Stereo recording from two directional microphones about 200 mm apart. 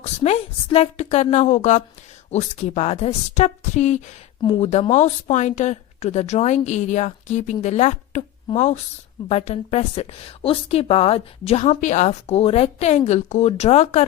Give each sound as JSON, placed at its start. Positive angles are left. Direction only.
{"t": 0.0, "sound": "a woman's voice", "side_deg": 30}